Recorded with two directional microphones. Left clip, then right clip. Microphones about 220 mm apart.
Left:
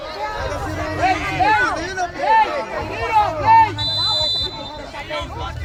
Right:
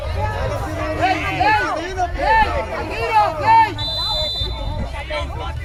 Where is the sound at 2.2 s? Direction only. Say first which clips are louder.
Left 1 dB; 50° right (ahead or behind).